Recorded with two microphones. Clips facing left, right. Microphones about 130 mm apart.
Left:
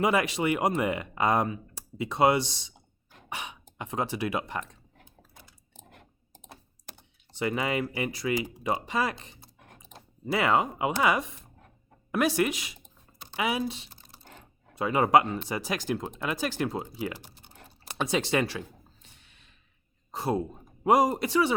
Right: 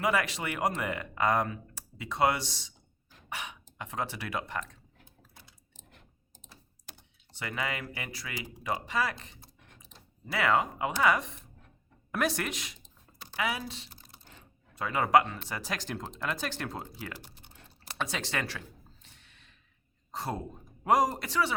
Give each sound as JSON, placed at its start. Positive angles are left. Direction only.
{"t": 0.0, "sound": "speech", "side_deg": 20}
{"t": 3.2, "sound": "cough", "side_deg": 20}
{"t": 3.8, "sound": "speech", "side_deg": 20}
{"t": 5.5, "sound": "typing", "side_deg": 50}
{"t": 7.3, "sound": "speech", "side_deg": 20}
{"t": 9.6, "sound": "typing", "side_deg": 50}
{"t": 10.2, "sound": "speech", "side_deg": 20}
{"t": 13.1, "sound": "speech", "side_deg": 20}
{"t": 19.0, "sound": "a sound", "side_deg": 15}
{"t": 20.1, "sound": "speech", "side_deg": 15}